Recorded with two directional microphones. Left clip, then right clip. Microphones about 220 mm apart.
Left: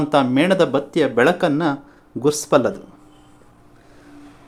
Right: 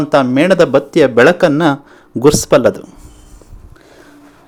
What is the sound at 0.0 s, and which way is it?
Speech, 15° right (ahead or behind).